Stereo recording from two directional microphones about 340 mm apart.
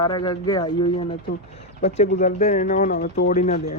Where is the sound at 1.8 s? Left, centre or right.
Left.